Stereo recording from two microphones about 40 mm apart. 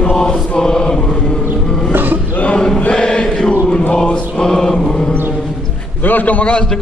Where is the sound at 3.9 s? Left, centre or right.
Left.